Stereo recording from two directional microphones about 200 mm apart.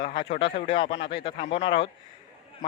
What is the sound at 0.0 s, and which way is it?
Speech, 25° left (ahead or behind).